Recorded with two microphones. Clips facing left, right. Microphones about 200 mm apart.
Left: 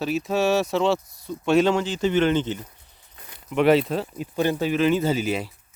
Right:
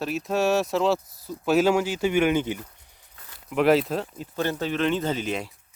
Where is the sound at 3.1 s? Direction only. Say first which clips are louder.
Left 3 dB; 20° left (ahead or behind).